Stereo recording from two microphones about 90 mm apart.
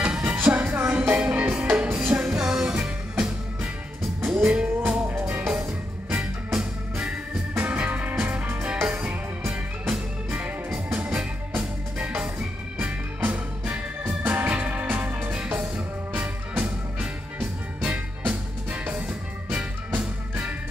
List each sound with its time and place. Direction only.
0.0 s music: 15° right (ahead or behind)
6.0 s music: 10° right (ahead or behind); by 9.5 s 25° right (ahead or behind)
9.5 s music: 10° right (ahead or behind)